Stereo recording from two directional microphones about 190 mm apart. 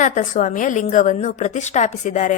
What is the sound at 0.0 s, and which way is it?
A woman's voice, 45° left (ahead or behind).